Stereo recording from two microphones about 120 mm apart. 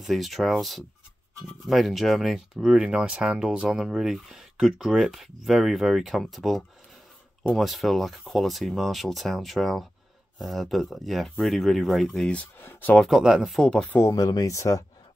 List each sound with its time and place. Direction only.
0.0 s speech: centre (ahead or behind); by 12.9 s 15° left (ahead or behind)
12.9 s speech: centre (ahead or behind)
13.9 s speech: 25° left (ahead or behind)